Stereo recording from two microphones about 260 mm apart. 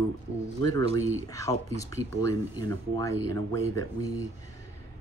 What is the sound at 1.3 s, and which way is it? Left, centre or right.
Speech, centre.